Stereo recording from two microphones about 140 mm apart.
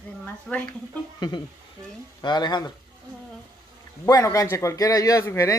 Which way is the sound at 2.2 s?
30° left (ahead or behind).